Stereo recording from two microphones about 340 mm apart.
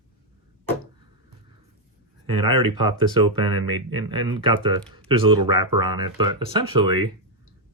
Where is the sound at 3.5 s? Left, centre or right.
Right.